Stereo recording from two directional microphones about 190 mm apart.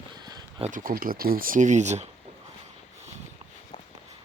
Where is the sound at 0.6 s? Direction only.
45° right (ahead or behind).